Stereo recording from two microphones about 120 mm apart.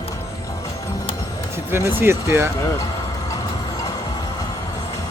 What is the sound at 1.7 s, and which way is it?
Speech, 20° right (ahead or behind).